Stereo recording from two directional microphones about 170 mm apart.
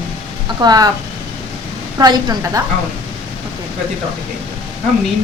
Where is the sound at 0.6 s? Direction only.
25° right (ahead or behind).